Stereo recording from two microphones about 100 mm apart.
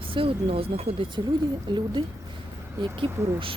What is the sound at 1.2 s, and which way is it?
Speech, 50° right (ahead or behind).